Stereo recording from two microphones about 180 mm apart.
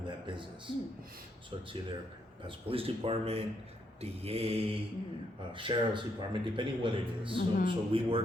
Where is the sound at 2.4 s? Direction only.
30° right (ahead or behind).